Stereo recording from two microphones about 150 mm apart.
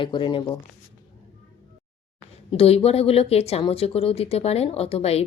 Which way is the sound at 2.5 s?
40° left (ahead or behind).